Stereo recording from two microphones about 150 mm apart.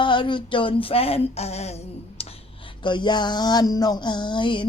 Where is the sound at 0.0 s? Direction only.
35° left (ahead or behind).